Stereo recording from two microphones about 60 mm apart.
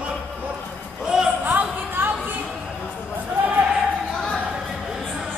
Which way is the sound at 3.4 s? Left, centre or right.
Right.